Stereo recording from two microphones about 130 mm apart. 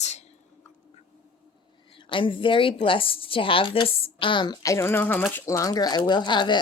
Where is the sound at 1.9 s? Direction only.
40° left (ahead or behind).